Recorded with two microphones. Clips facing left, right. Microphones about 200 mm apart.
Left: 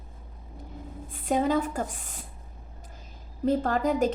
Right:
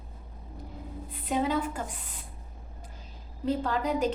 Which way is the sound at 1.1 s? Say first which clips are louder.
Left 4 dB; 45° left (ahead or behind).